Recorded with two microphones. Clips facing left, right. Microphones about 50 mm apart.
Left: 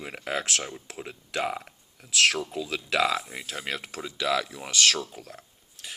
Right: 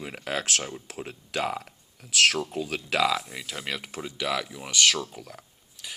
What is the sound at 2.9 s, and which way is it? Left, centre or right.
Speech, left.